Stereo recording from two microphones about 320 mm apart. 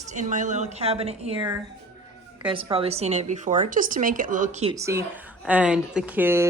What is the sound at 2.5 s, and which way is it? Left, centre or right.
Speech, centre.